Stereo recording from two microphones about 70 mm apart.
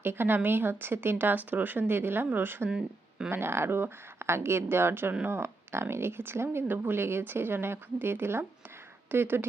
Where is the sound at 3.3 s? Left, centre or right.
Right.